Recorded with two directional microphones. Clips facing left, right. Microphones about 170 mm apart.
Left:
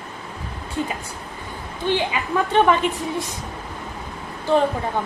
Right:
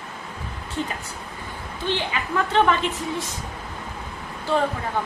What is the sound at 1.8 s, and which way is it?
Speech, 15° left (ahead or behind).